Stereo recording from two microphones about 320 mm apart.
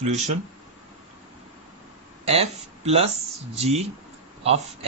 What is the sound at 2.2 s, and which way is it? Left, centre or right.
Speech, centre.